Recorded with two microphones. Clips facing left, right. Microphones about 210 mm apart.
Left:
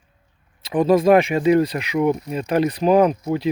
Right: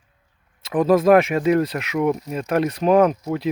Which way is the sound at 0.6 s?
Centre (ahead or behind).